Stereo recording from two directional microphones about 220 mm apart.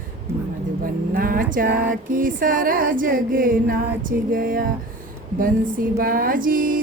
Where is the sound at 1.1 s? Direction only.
40° right (ahead or behind).